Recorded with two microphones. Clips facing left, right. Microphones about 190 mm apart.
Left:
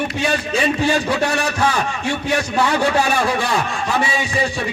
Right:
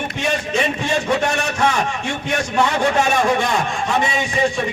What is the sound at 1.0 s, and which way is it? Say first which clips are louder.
A man's voice: even; 35° left (ahead or behind).